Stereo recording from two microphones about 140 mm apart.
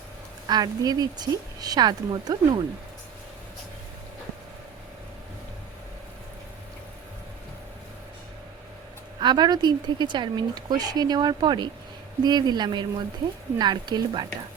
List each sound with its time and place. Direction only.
0.4 s speech: 30° right (ahead or behind)
9.2 s speech: 30° right (ahead or behind)